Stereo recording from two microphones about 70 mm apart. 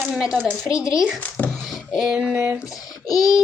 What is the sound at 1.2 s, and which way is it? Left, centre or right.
Speech, left.